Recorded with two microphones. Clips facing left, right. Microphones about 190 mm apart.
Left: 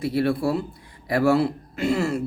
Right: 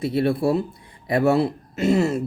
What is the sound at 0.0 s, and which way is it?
Speech, 25° right (ahead or behind).